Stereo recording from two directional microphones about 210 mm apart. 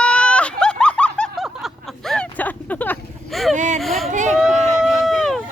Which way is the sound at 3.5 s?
35° right (ahead or behind).